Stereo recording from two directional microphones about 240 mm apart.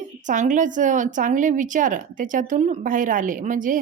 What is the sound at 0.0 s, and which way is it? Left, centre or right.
A woman's voice, right.